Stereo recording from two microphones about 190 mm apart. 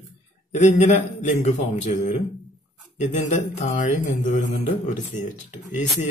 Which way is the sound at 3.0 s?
40° left (ahead or behind).